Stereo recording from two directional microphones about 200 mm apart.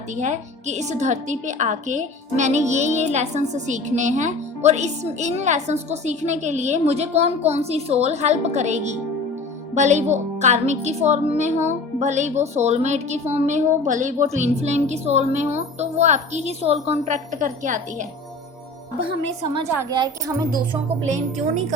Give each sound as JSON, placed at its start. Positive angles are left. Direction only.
{"t": 0.2, "sound": "a woman's voice", "side_deg": -35}
{"t": 19.6, "sound": "speech", "side_deg": -15}